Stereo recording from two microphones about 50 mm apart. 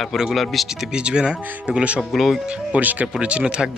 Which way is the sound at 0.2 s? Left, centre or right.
Centre.